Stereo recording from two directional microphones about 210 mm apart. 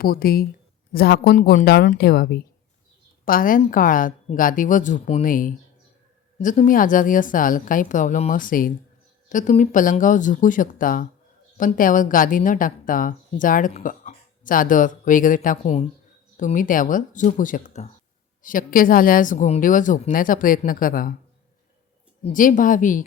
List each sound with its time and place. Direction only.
0.0 s a woman's voice: 45° left (ahead or behind)
22.2 s a woman's voice: 40° left (ahead or behind)